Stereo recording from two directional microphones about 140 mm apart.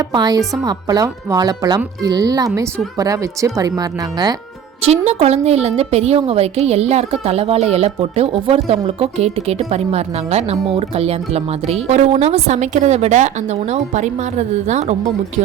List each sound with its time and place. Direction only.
0.1 s speech: 30° right (ahead or behind)
4.8 s a woman's voice: 45° right (ahead or behind)